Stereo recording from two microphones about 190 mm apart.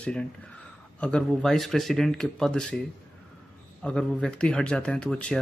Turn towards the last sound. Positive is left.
turn(degrees=5)  # may be behind; listen again after turning